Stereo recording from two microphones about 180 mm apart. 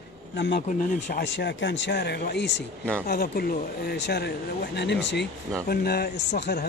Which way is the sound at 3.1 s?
60° left (ahead or behind).